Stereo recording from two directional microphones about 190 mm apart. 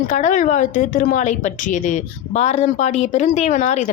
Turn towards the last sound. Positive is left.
turn(degrees=40)  # may be behind; listen again after turning